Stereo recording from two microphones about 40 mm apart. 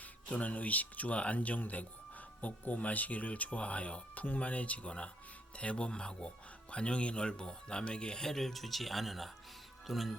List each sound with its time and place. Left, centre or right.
0.0 s speech: left; by 10.2 s centre